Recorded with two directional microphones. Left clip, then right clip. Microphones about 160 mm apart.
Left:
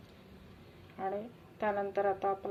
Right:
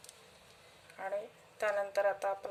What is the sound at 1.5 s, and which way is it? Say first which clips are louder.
Speech: even; 25° right (ahead or behind).